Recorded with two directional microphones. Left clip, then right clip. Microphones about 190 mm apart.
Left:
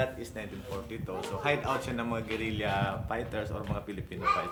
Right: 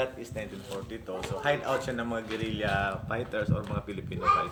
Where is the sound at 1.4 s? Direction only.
5° left (ahead or behind).